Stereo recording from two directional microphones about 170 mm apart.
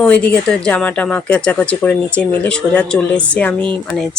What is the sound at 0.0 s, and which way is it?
Speech, 10° left (ahead or behind).